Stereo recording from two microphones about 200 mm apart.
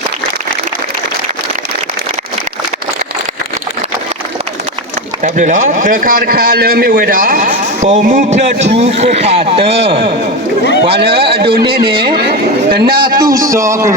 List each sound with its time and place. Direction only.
5.2 s a man's voice: 40° right (ahead or behind)
10.9 s speech: 55° right (ahead or behind)
11.8 s speech: 25° right (ahead or behind)
12.7 s a man's voice: 50° right (ahead or behind)
13.1 s a man's voice: 15° right (ahead or behind)